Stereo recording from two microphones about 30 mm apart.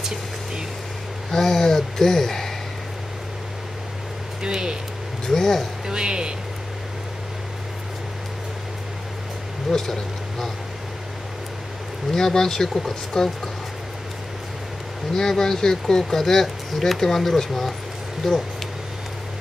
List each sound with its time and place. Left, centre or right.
1.3 s speech: centre
4.4 s speech: right
5.2 s speech: centre
5.9 s speech: right
9.7 s speech: centre
12.1 s speech: centre
15.1 s speech: centre